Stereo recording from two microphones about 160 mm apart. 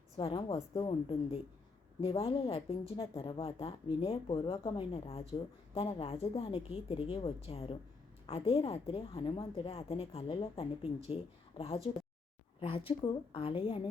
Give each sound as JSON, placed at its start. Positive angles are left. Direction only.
{"t": 0.2, "sound": "a woman's voice", "side_deg": 35}